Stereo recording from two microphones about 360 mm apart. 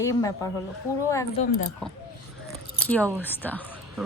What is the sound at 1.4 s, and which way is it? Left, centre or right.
Speech, centre.